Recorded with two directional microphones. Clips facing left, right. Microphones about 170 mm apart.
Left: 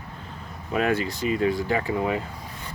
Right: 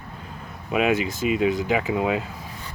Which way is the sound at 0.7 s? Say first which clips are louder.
Right 2 dB; 10° right (ahead or behind).